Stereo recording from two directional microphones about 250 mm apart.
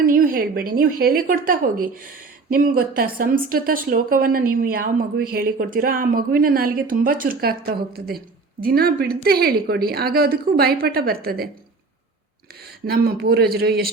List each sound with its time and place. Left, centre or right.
0.0 s speech: right
12.8 s speech: right